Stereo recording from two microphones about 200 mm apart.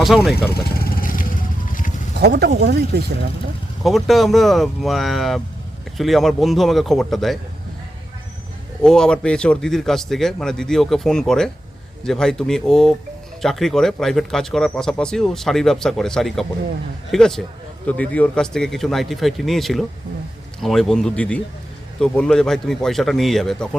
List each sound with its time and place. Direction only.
0.1 s speech: centre (ahead or behind)
1.0 s music: 45° left (ahead or behind)
2.1 s speech: 55° right (ahead or behind)
3.8 s speech: centre (ahead or behind)
8.8 s speech: 5° left (ahead or behind)